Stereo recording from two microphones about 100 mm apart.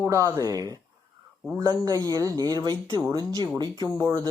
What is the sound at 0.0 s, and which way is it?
Speech, 30° right (ahead or behind).